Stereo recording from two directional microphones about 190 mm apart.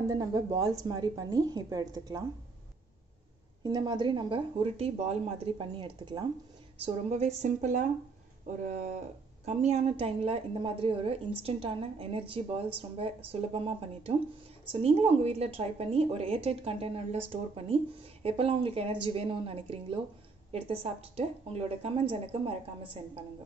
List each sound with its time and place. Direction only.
0.1 s speech: 20° right (ahead or behind)
3.6 s speech: 20° right (ahead or behind)
7.1 s a woman's voice: 35° right (ahead or behind)